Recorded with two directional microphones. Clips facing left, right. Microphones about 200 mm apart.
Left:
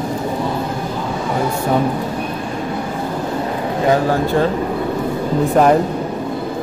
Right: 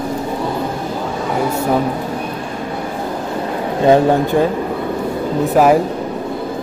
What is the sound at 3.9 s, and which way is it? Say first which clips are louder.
Speech: right 4 dB; 20° right (ahead or behind).